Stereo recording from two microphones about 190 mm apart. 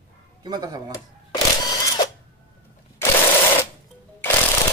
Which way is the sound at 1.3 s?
20° left (ahead or behind).